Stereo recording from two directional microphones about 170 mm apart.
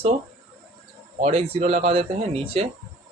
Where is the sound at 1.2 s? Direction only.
35° right (ahead or behind).